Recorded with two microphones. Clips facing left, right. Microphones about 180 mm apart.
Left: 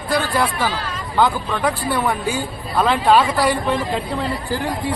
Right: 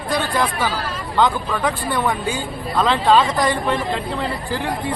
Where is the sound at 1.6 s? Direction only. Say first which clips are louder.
Left 1 dB; 10° left (ahead or behind).